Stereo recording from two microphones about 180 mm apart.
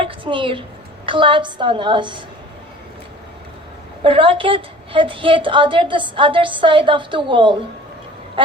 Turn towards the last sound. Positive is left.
turn(degrees=-25)  # may be behind; listen again after turning